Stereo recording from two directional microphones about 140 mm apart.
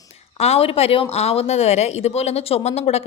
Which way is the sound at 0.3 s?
45° left (ahead or behind).